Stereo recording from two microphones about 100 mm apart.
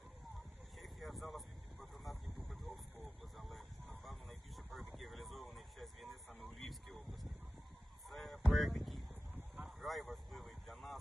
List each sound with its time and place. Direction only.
0.8 s vehicle: centre (ahead or behind)
3.3 s a sound: centre (ahead or behind)
8.0 s honk: centre (ahead or behind)
9.6 s vehicle: centre (ahead or behind)